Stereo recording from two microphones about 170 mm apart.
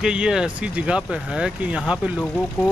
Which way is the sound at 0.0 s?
5° right (ahead or behind).